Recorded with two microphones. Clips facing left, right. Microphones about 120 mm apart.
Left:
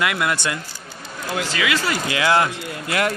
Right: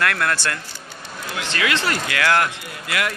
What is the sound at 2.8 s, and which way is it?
Speech, 35° left (ahead or behind).